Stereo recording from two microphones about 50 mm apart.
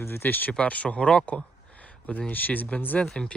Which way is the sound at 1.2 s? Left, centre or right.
Left.